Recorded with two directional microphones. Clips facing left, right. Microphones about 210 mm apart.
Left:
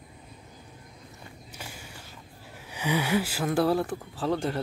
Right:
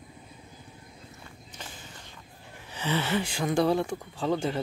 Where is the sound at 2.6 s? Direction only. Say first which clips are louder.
Left 1 dB; 10° left (ahead or behind).